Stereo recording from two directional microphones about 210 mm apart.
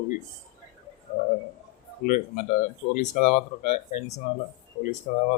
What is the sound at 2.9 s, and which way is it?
Speech, 40° left (ahead or behind).